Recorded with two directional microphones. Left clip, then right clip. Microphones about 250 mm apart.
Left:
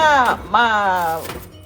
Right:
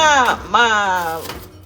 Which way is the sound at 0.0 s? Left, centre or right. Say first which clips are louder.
Right 1 dB; centre.